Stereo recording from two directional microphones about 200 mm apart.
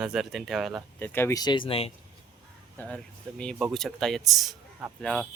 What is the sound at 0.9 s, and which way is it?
Speech, 10° left (ahead or behind).